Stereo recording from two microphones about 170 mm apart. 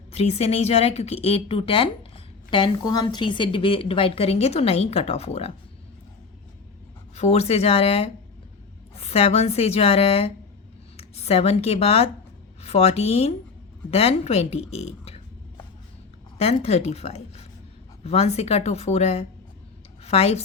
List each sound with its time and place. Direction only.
0.1 s a woman's voice: 40° left (ahead or behind)
7.2 s a woman's voice: 40° left (ahead or behind)
16.4 s a woman's voice: 40° left (ahead or behind)